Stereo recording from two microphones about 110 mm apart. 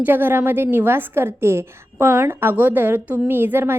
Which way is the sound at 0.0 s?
20° right (ahead or behind).